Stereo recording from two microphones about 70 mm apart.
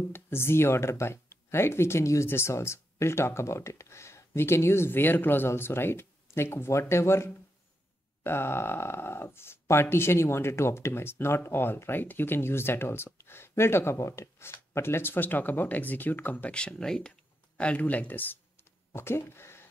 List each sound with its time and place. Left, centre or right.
0.1 s speech: left
16.5 s speech: centre
18.9 s speech: left